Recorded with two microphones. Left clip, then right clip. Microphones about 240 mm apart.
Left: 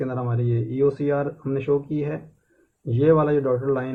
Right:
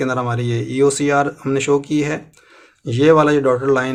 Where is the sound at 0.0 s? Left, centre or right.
Right.